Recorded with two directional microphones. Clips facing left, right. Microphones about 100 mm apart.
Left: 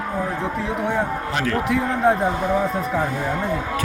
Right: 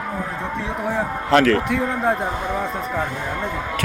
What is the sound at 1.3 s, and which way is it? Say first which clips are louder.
Speech: right 9 dB; 90° right.